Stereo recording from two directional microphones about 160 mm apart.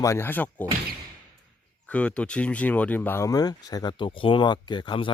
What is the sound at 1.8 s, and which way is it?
Speech, 10° left (ahead or behind).